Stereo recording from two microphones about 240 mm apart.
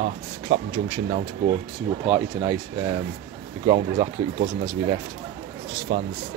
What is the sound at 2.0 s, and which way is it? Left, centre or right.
Speech, centre.